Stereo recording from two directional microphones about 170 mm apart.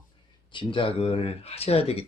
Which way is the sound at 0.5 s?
30° left (ahead or behind).